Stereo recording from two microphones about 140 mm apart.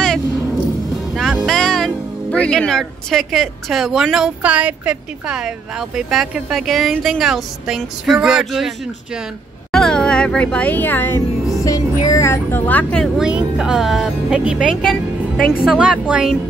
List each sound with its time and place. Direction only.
1.1 s speech: centre (ahead or behind)
13.2 s speech: 5° right (ahead or behind)